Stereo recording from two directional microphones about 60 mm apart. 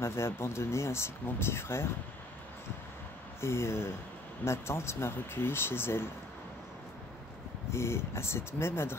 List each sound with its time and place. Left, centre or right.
0.0 s speech: left
3.3 s speech: left
7.7 s speech: left